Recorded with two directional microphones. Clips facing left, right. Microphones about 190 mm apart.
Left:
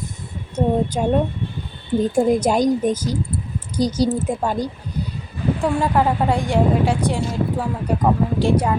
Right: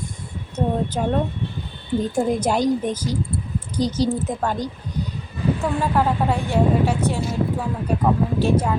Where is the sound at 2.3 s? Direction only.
10° left (ahead or behind).